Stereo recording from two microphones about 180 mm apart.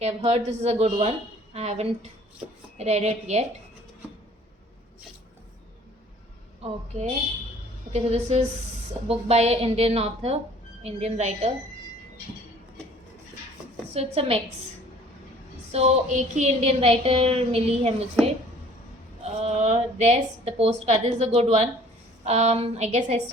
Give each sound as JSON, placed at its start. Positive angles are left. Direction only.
{"t": 0.0, "sound": "a woman's voice", "side_deg": -35}
{"t": 7.9, "sound": "a woman's voice", "side_deg": -35}
{"t": 13.9, "sound": "a woman's voice", "side_deg": -35}
{"t": 15.7, "sound": "a woman's voice", "side_deg": -40}
{"t": 19.2, "sound": "a woman's voice", "side_deg": -40}